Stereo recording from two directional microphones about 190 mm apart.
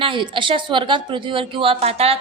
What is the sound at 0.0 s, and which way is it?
A woman's voice, 25° right (ahead or behind).